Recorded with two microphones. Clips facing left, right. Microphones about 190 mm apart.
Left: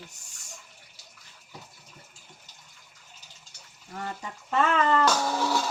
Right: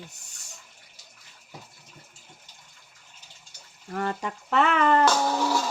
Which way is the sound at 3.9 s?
70° right (ahead or behind).